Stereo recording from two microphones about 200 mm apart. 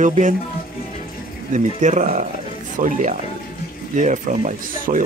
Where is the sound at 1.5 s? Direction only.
35° right (ahead or behind).